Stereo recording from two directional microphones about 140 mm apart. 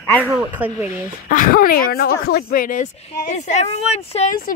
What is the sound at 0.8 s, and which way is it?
Speech, 70° left (ahead or behind).